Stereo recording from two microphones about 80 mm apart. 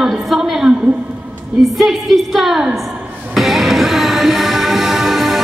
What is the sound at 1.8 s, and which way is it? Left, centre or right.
A man's voice, centre.